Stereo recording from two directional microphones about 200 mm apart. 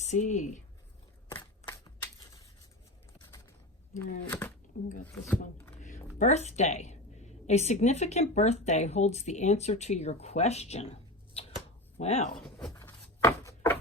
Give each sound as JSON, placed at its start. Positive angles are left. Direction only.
{"t": 0.0, "sound": "speech", "side_deg": 35}
{"t": 1.6, "sound": "shuffling cards", "side_deg": 20}
{"t": 3.9, "sound": "speech", "side_deg": 10}
{"t": 4.7, "sound": "a woman's voice", "side_deg": 40}
{"t": 6.1, "sound": "a woman's voice", "side_deg": 35}
{"t": 11.9, "sound": "a woman's voice", "side_deg": 30}
{"t": 12.4, "sound": "speech", "side_deg": 5}
{"t": 12.7, "sound": "a sound", "side_deg": 10}